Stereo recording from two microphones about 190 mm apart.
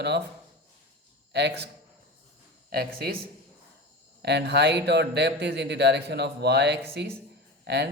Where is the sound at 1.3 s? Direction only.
65° right (ahead or behind).